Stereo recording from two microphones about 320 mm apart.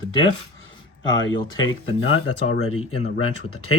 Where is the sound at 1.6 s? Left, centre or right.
Left.